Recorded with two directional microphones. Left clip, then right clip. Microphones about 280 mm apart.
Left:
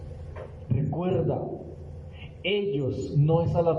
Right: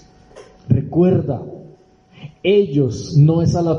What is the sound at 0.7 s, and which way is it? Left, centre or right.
Speech, right.